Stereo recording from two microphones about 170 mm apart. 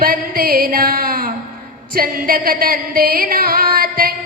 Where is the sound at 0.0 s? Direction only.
60° right (ahead or behind).